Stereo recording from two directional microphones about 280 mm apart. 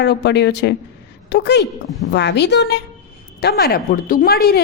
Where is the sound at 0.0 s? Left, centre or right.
Left.